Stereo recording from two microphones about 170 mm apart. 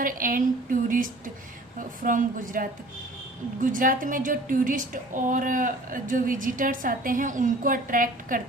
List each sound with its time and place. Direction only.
0.0 s a woman's voice: 55° right (ahead or behind)